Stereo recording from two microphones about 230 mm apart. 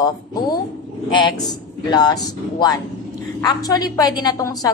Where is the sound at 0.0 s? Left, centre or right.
Centre.